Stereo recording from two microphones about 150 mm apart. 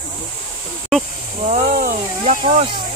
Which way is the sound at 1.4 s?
65° right (ahead or behind).